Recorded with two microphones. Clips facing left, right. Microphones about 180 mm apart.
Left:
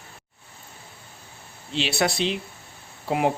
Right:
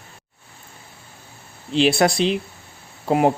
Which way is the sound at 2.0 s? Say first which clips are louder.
Right 6 dB; 50° right (ahead or behind).